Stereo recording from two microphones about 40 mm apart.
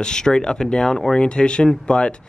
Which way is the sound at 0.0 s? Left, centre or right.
Centre.